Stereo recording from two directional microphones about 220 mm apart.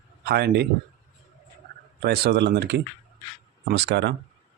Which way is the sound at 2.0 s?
45° right (ahead or behind).